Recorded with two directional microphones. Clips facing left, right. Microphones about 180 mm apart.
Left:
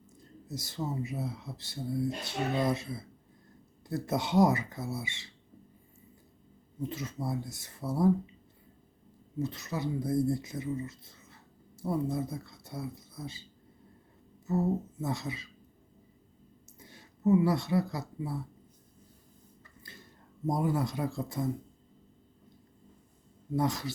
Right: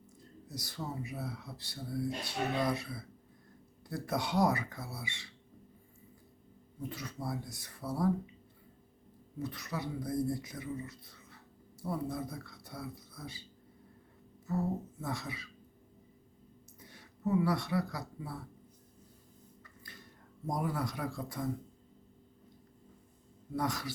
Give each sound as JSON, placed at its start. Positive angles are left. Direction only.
{"t": 0.4, "sound": "speech", "side_deg": 25}
{"t": 6.8, "sound": "speech", "side_deg": 25}
{"t": 9.4, "sound": "speech", "side_deg": 25}
{"t": 14.5, "sound": "speech", "side_deg": 25}
{"t": 16.8, "sound": "speech", "side_deg": 25}
{"t": 19.8, "sound": "a sound", "side_deg": 25}
{"t": 20.5, "sound": "speech", "side_deg": 25}
{"t": 23.6, "sound": "speech", "side_deg": 25}